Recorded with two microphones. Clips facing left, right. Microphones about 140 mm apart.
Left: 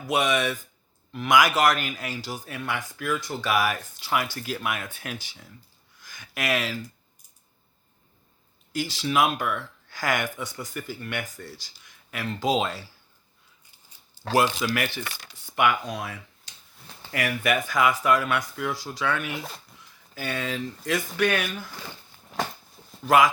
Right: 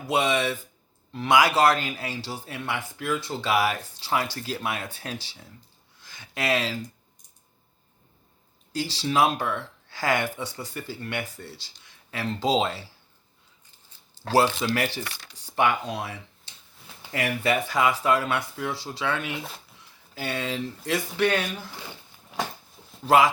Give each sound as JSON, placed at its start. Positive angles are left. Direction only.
{"t": 0.1, "sound": "speech", "side_deg": -30}
{"t": 6.0, "sound": "a sound", "side_deg": -25}
{"t": 8.7, "sound": "speech", "side_deg": -30}
{"t": 13.7, "sound": "a sound", "side_deg": 15}
{"t": 14.6, "sound": "speech", "side_deg": -30}
{"t": 19.4, "sound": "speech", "side_deg": 0}
{"t": 20.1, "sound": "speech", "side_deg": -30}
{"t": 23.0, "sound": "speech", "side_deg": -30}